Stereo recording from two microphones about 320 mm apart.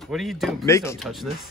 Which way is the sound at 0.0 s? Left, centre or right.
Centre.